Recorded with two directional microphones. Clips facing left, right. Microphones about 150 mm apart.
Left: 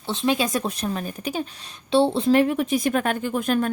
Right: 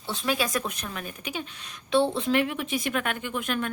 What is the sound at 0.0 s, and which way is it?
A woman's voice, 25° left (ahead or behind).